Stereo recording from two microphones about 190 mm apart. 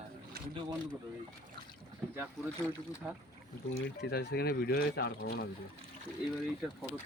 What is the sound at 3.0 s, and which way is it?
Speech, 5° right (ahead or behind).